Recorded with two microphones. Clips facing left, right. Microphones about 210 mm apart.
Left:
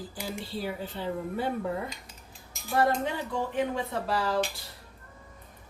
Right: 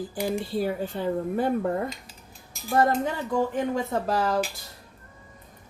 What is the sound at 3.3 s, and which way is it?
Speech, 45° right (ahead or behind).